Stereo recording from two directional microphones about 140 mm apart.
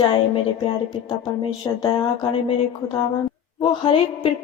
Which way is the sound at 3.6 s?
35° left (ahead or behind).